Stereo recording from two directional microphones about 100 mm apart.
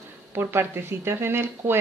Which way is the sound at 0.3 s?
25° right (ahead or behind).